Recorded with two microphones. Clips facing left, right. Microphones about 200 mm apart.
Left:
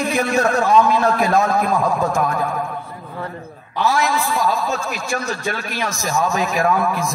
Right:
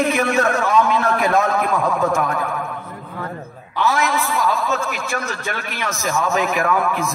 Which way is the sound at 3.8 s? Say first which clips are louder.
Left 1 dB; 35° left (ahead or behind).